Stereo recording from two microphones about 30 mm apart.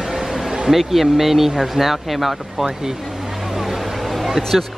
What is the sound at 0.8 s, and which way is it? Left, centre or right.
Speech, centre.